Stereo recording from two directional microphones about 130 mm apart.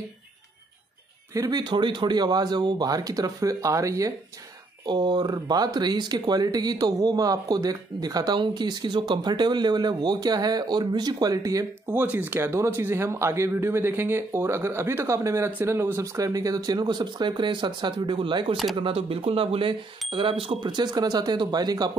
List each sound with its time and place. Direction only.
1.3 s speech: 30° right (ahead or behind)